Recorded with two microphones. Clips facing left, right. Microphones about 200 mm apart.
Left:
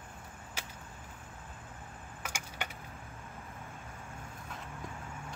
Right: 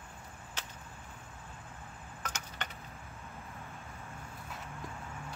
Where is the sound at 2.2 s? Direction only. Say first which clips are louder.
Left 1 dB; 10° left (ahead or behind).